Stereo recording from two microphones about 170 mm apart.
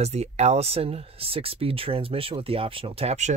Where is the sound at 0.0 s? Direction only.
40° right (ahead or behind).